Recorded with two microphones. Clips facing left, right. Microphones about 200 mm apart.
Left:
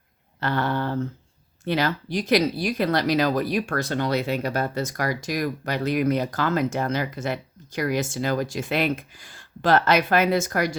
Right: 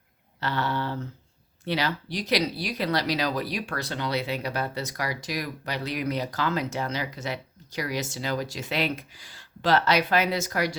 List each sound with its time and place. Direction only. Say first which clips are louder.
0.3 s speech: left 4 dB; 50° left (ahead or behind)